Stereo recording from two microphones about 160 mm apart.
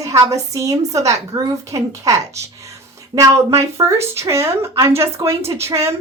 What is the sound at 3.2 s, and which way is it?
A woman's voice, 20° right (ahead or behind).